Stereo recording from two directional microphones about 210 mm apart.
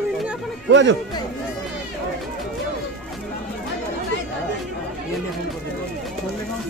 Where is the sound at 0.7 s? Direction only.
60° right (ahead or behind).